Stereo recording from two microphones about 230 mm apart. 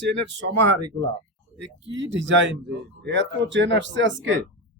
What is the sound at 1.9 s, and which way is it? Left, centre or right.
Speech, right.